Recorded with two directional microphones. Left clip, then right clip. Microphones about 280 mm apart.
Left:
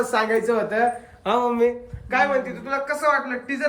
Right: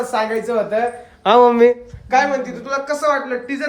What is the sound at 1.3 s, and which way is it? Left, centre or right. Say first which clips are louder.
Speech: right 9 dB; right.